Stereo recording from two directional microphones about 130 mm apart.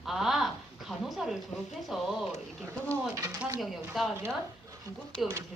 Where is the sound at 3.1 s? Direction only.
25° right (ahead or behind).